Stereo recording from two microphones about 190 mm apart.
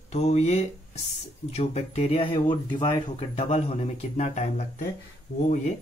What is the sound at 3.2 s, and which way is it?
Speech, 35° left (ahead or behind).